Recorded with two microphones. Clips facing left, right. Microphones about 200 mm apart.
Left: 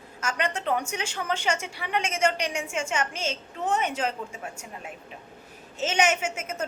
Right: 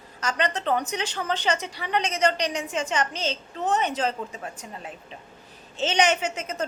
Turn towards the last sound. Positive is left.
turn(degrees=10)  # may be behind; listen again after turning